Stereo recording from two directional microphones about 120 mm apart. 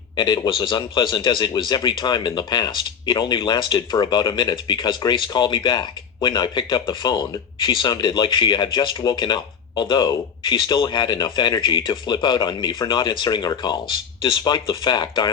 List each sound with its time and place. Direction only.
0.2 s speech: 40° left (ahead or behind)